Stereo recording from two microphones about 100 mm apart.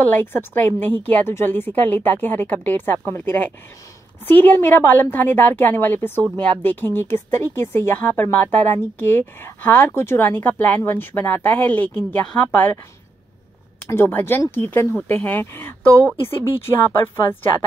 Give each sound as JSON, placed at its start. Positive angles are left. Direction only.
{"t": 0.0, "sound": "a woman's voice", "side_deg": 20}
{"t": 13.8, "sound": "a woman's voice", "side_deg": 25}